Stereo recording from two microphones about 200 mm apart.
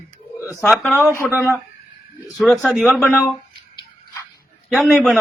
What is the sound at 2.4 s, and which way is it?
Speech, centre (ahead or behind).